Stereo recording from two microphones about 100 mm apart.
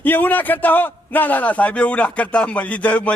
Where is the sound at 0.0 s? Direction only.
20° left (ahead or behind).